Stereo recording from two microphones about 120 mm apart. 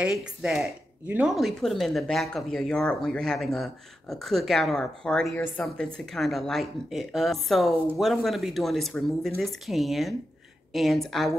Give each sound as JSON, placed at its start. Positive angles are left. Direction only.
{"t": 0.0, "sound": "speech", "side_deg": -5}
{"t": 1.3, "sound": "speech", "side_deg": 0}